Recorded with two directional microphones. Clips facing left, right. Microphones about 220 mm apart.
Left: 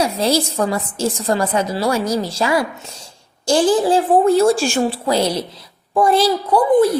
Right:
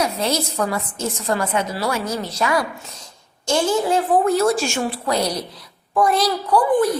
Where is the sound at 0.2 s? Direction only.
30° left (ahead or behind).